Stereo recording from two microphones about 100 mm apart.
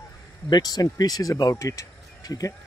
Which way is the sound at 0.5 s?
40° left (ahead or behind).